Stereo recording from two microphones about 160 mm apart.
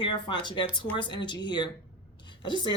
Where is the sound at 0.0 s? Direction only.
30° left (ahead or behind).